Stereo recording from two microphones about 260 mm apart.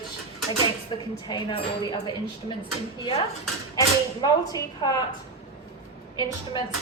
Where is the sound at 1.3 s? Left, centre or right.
Centre.